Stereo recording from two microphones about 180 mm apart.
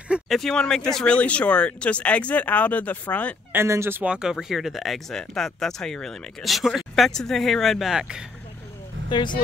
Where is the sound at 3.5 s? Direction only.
15° right (ahead or behind).